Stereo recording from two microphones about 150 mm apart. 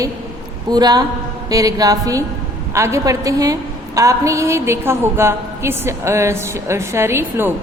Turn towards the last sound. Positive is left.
turn(degrees=-15)  # may be behind; listen again after turning